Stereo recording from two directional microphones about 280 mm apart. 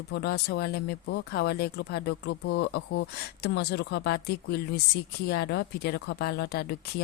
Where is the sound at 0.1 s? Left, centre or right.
Left.